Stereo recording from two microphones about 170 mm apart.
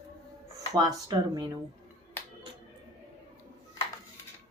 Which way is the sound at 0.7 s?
20° right (ahead or behind).